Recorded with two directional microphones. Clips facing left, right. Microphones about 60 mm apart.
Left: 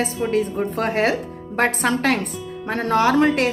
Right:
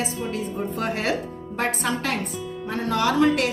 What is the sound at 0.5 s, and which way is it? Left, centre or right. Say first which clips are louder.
Speech: left 4 dB; left.